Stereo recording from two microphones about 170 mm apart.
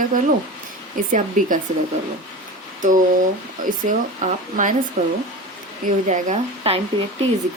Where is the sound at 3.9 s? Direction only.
50° right (ahead or behind).